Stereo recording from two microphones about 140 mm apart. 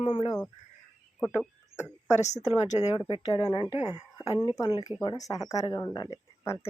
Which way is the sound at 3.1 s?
35° left (ahead or behind).